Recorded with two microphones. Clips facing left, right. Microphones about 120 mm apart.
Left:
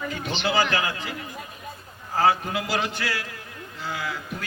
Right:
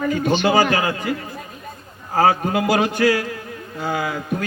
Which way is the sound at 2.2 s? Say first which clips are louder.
Right 5 dB; 50° right (ahead or behind).